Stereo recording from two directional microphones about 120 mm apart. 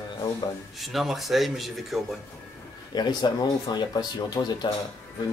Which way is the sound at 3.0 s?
35° left (ahead or behind).